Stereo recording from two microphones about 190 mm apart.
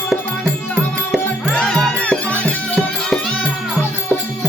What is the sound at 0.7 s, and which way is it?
Music, 10° left (ahead or behind).